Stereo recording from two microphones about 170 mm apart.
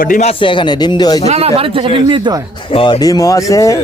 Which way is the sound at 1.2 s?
35° right (ahead or behind).